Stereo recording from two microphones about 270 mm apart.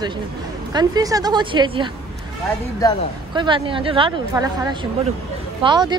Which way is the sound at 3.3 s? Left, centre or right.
Centre.